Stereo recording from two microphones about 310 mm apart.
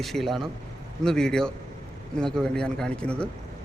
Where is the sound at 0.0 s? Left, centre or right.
Centre.